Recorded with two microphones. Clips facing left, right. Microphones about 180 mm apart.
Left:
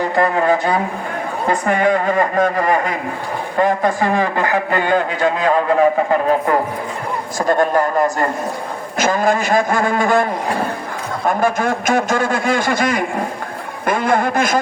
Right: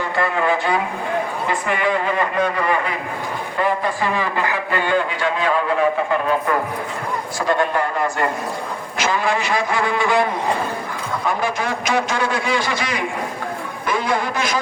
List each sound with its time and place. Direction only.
0.0 s a man's voice: 40° left (ahead or behind)
7.3 s a man's voice: 45° left (ahead or behind)
11.3 s a man's voice: 50° left (ahead or behind)